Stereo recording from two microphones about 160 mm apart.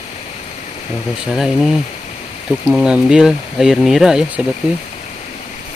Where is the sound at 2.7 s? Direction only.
5° right (ahead or behind).